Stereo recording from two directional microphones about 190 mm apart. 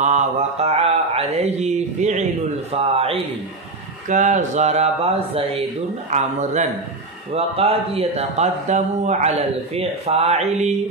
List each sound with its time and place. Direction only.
0.0 s mantra: 35° right (ahead or behind)
2.7 s speech: 30° right (ahead or behind)